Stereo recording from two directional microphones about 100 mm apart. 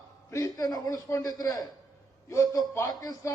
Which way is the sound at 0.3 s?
35° left (ahead or behind).